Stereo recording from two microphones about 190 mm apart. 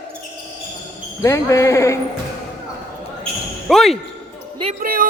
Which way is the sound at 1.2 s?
15° left (ahead or behind).